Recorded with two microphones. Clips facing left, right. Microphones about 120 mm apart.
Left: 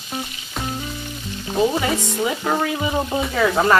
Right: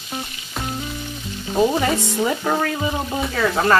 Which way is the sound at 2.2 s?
Centre (ahead or behind).